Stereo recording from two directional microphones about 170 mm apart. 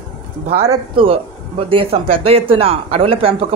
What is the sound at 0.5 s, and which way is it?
A woman's voice, 35° right (ahead or behind).